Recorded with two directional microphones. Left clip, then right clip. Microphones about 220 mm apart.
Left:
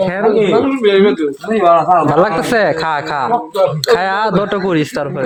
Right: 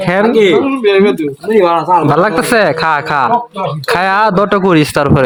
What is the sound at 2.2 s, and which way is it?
Speech, 10° right (ahead or behind).